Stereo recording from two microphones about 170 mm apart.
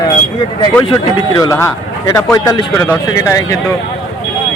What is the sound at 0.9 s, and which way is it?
Speech, 30° left (ahead or behind).